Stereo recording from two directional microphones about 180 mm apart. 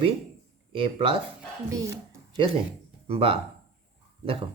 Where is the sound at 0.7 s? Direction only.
30° right (ahead or behind).